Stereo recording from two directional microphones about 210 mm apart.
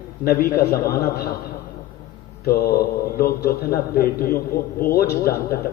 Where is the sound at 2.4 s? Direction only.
45° left (ahead or behind).